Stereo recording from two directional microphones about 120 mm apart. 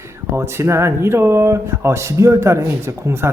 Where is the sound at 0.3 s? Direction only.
20° right (ahead or behind).